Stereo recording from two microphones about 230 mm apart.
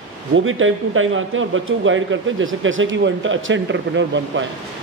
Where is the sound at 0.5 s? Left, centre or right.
Right.